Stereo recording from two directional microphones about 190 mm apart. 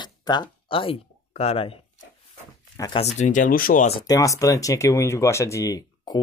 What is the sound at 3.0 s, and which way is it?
Speech, 35° left (ahead or behind).